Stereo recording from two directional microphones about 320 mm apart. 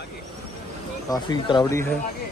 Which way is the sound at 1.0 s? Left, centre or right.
Centre.